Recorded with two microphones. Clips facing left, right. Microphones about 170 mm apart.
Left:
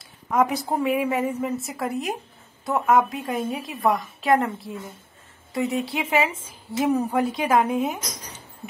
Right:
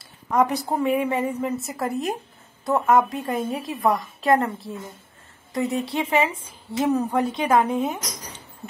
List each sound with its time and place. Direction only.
0.0 s a woman's voice: centre (ahead or behind)